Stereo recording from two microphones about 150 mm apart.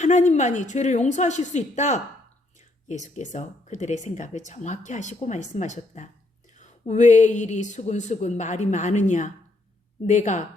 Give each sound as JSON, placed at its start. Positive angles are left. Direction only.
{"t": 0.0, "sound": "speech", "side_deg": 50}